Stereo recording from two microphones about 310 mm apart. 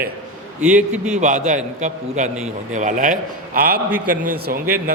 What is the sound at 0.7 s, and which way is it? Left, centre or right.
A man's voice, right.